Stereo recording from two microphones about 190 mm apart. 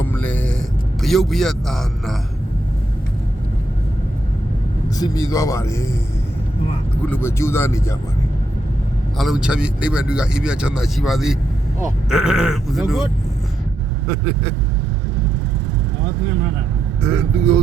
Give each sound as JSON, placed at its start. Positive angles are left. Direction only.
{"t": 0.0, "sound": "music", "side_deg": 10}
{"t": 1.0, "sound": "speech", "side_deg": 0}
{"t": 4.9, "sound": "speech", "side_deg": 20}
{"t": 7.0, "sound": "speech", "side_deg": 10}
{"t": 9.1, "sound": "speech", "side_deg": 0}
{"t": 17.0, "sound": "speech", "side_deg": -5}